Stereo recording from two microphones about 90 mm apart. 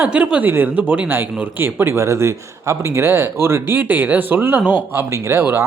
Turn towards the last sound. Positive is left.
turn(degrees=-30)  # may be behind; listen again after turning